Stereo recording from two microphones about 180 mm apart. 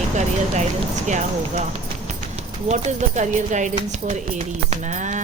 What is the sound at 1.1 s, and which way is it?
Speech, 40° right (ahead or behind).